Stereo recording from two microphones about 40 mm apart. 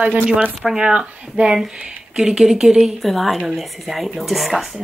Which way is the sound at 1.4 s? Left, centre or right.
Right.